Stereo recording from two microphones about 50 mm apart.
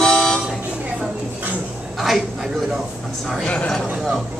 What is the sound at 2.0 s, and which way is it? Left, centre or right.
Speech, centre.